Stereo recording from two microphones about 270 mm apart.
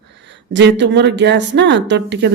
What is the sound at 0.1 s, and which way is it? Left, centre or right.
A woman's voice, right.